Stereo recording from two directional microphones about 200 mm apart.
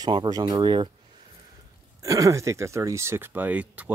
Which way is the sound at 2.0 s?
15° right (ahead or behind).